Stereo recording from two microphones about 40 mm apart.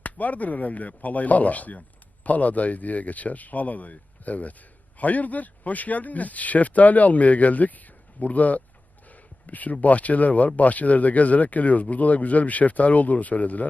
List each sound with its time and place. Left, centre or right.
0.0 s speech: left
9.0 s a sound: left
9.8 s speech: left